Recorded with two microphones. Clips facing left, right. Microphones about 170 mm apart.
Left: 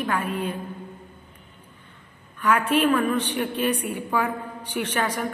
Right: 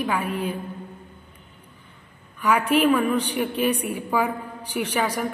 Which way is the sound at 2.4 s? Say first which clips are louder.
Right 1 dB; 10° right (ahead or behind).